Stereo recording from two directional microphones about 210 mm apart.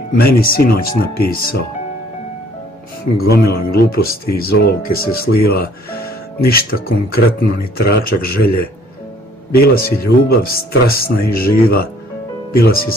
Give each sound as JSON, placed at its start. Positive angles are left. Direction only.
{"t": 0.2, "sound": "speech", "side_deg": 45}
{"t": 3.3, "sound": "speech", "side_deg": 45}
{"t": 9.5, "sound": "speech", "side_deg": 45}